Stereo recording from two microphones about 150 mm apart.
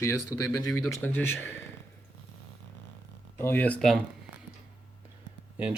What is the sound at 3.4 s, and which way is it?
Speech, 15° left (ahead or behind).